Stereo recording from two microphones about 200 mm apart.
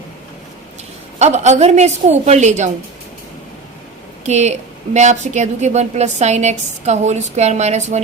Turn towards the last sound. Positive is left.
turn(degrees=-35)  # may be behind; listen again after turning